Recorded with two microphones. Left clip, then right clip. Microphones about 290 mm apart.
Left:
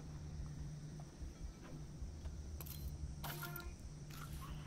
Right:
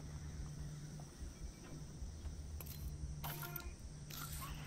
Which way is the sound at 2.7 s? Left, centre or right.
Centre.